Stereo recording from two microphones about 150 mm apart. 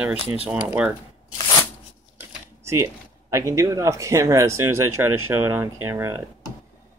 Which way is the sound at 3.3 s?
20° right (ahead or behind).